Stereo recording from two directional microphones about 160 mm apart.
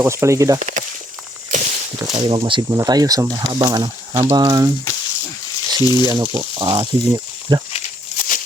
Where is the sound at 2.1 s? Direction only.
25° right (ahead or behind).